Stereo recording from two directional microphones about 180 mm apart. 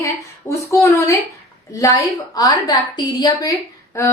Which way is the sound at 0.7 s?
15° left (ahead or behind).